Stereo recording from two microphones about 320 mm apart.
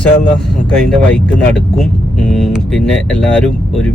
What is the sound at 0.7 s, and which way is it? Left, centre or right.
Speech, centre.